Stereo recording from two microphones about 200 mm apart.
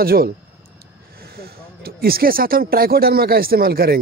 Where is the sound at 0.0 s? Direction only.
50° right (ahead or behind).